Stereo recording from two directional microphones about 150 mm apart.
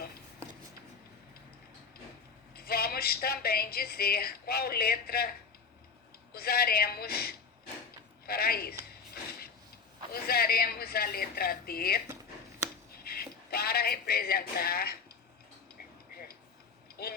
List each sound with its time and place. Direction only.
2.6 s speech: 90° left
6.3 s speech: 90° left
10.1 s speech: 90° left
12.9 s a sound: 90° left
16.1 s tick-tock: 90° left
17.0 s speech: 90° left